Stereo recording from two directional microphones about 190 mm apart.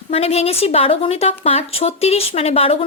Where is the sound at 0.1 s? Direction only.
35° left (ahead or behind).